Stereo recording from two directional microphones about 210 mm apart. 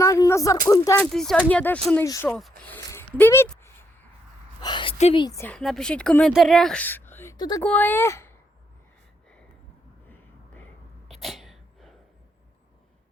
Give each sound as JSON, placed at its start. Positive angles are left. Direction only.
{"t": 0.0, "sound": "a woman's voice", "side_deg": 15}
{"t": 1.1, "sound": "speech", "side_deg": 0}
{"t": 2.9, "sound": "a sound", "side_deg": 10}
{"t": 4.6, "sound": "a woman's voice", "side_deg": 20}
{"t": 5.2, "sound": "a woman's voice", "side_deg": 10}
{"t": 10.1, "sound": "a sound", "side_deg": 10}
{"t": 11.1, "sound": "sneeze", "side_deg": 0}